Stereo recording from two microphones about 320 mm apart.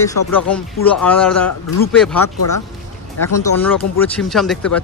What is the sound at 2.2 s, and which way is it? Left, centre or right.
Speech, left.